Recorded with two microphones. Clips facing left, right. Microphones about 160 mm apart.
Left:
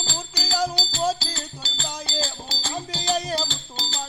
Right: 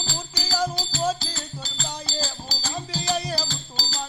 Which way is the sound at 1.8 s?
30° left (ahead or behind).